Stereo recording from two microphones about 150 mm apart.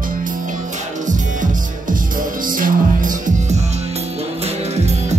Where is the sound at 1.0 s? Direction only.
60° right (ahead or behind).